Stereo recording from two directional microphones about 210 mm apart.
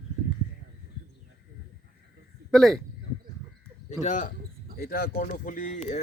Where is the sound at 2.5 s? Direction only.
Centre (ahead or behind).